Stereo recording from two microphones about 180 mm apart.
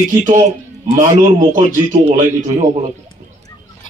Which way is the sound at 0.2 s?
45° right (ahead or behind).